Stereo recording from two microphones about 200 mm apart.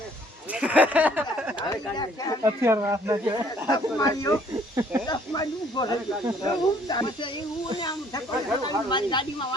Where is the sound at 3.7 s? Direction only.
20° left (ahead or behind).